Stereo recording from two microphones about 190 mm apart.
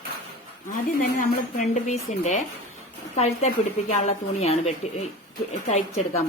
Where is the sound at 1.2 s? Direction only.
40° left (ahead or behind).